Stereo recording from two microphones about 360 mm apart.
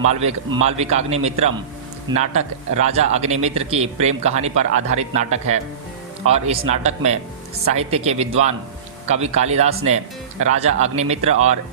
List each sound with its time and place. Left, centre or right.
0.1 s speech: centre